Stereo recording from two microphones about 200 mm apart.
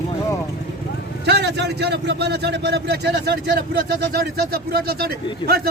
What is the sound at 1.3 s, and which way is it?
A man's voice, 55° right (ahead or behind).